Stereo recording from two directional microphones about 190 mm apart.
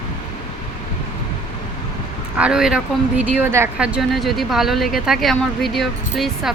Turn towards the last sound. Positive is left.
turn(degrees=0)  # may be behind; listen again after turning